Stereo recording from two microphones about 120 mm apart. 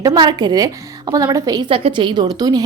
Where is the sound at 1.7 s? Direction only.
50° right (ahead or behind); by 2.6 s 35° right (ahead or behind).